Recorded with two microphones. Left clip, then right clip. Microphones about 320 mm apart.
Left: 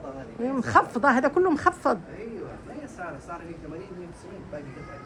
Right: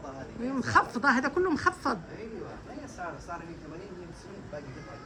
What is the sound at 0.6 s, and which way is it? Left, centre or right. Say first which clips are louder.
Speech: left 4 dB; centre.